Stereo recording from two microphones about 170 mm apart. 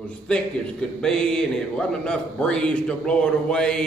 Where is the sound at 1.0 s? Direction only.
5° left (ahead or behind).